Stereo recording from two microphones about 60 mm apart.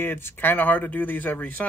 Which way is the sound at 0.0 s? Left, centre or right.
Left.